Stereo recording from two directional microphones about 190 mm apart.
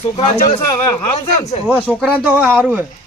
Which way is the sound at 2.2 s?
10° right (ahead or behind).